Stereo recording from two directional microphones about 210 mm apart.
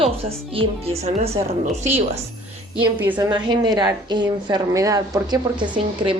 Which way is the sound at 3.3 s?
20° right (ahead or behind).